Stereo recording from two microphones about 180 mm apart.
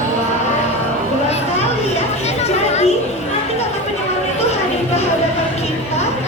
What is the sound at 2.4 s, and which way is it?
Chatter, 40° left (ahead or behind).